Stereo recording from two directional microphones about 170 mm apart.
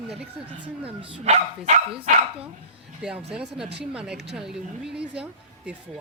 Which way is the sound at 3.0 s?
5° right (ahead or behind).